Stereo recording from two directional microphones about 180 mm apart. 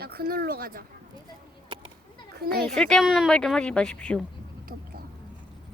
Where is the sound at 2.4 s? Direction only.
60° right (ahead or behind).